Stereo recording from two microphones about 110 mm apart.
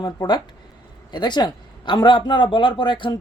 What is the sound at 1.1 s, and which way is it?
A man's voice, 40° left (ahead or behind).